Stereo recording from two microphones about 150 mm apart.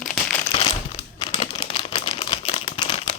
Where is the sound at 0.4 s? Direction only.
40° left (ahead or behind).